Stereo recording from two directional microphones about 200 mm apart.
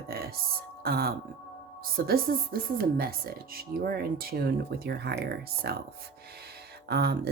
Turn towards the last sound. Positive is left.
turn(degrees=-55)  # may be behind; listen again after turning